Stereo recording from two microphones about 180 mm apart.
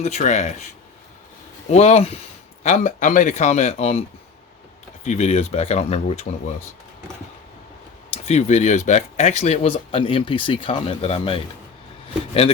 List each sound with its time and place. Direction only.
0.0 s speech: 40° left (ahead or behind)
1.7 s speech: 35° left (ahead or behind)
5.0 s speech: 40° left (ahead or behind)
8.1 s speech: 35° left (ahead or behind)